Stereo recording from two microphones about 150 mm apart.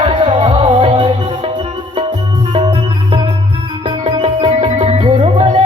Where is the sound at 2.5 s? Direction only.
35° right (ahead or behind).